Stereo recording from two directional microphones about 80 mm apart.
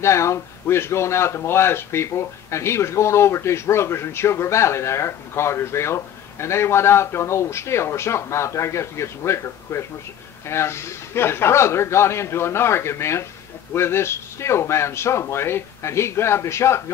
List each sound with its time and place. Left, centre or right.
0.0 s speech: left